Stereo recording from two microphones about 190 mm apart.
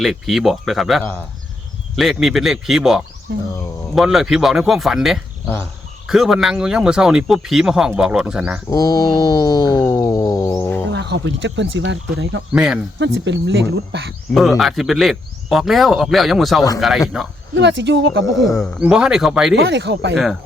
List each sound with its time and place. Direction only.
0.0 s speech: centre (ahead or behind)
8.7 s a sound: 20° left (ahead or behind)
10.9 s speech: 65° right (ahead or behind)
12.5 s speech: 5° right (ahead or behind)
13.0 s speech: 70° right (ahead or behind)
14.3 s speech: centre (ahead or behind)
17.5 s speech: 70° right (ahead or behind)
18.3 s speech: centre (ahead or behind)
19.5 s speech: 60° right (ahead or behind)